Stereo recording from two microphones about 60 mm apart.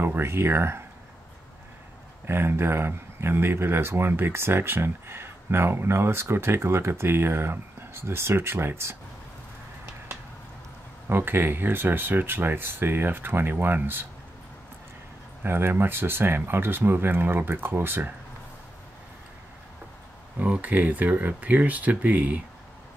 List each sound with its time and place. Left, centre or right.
0.0 s speech: right
2.2 s speech: right
11.1 s speech: right
15.4 s speech: right
20.3 s speech: right